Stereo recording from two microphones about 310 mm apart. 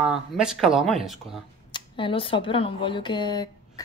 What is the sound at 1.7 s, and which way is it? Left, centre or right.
Speech, centre.